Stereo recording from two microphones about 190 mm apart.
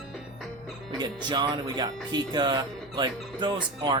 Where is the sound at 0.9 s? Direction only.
25° right (ahead or behind).